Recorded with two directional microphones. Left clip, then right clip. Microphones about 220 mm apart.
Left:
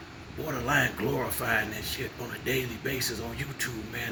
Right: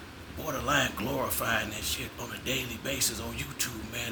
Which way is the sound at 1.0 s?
15° right (ahead or behind).